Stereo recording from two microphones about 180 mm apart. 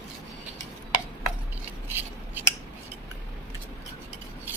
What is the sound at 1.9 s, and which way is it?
Scissors, 10° right (ahead or behind).